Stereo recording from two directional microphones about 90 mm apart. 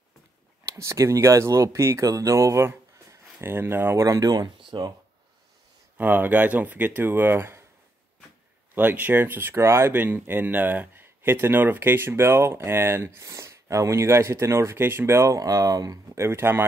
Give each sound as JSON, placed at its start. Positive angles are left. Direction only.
{"t": 0.7, "sound": "speech", "side_deg": -35}
{"t": 4.6, "sound": "a sound", "side_deg": -65}
{"t": 5.9, "sound": "speech", "side_deg": -20}
{"t": 8.7, "sound": "speech", "side_deg": -20}
{"t": 16.2, "sound": "speech", "side_deg": -30}